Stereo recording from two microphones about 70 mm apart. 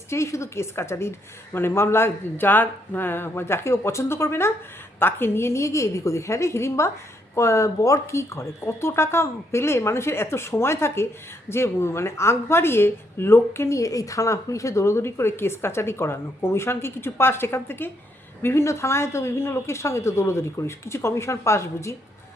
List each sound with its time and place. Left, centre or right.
0.1 s speech: left
18.4 s speech: left